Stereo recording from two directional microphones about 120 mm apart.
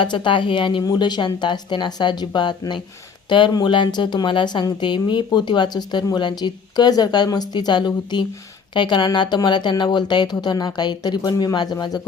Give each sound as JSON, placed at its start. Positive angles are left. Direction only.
{"t": 0.0, "sound": "a woman's voice", "side_deg": 45}